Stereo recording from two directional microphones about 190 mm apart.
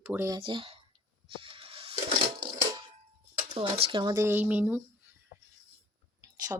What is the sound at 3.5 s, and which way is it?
Speech, 20° right (ahead or behind).